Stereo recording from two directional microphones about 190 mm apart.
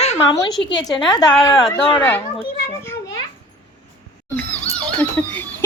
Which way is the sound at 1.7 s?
25° left (ahead or behind).